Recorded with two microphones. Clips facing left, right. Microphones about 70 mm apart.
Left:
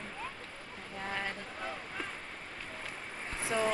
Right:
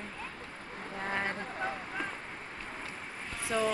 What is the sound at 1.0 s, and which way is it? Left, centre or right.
Speech, right.